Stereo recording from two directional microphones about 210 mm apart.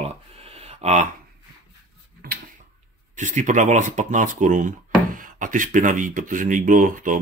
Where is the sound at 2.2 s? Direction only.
45° right (ahead or behind).